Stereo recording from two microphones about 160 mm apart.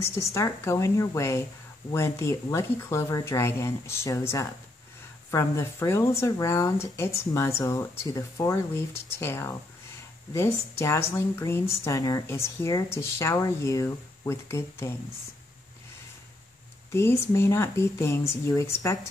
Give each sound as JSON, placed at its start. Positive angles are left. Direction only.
{"t": 0.0, "sound": "a woman's voice", "side_deg": 20}
{"t": 16.9, "sound": "a woman's voice", "side_deg": 15}